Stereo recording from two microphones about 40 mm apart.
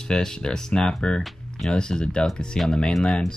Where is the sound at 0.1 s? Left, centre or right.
Centre.